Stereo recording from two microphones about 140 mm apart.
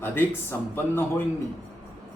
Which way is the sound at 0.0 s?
15° left (ahead or behind).